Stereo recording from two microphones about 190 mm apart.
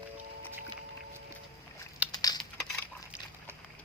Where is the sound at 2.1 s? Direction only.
20° left (ahead or behind).